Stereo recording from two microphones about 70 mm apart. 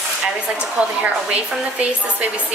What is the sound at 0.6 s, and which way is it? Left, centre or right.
Speech, centre.